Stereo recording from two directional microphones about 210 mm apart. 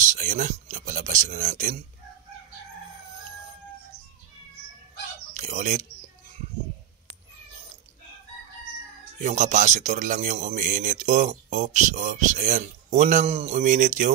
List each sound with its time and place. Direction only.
0.0 s speech: 35° right (ahead or behind)
5.3 s speech: 35° right (ahead or behind)
9.2 s speech: 35° right (ahead or behind)